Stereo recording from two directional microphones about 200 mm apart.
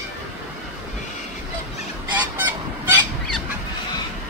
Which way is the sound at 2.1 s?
10° right (ahead or behind).